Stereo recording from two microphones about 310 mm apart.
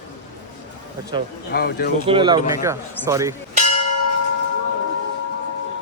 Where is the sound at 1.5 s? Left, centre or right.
Left.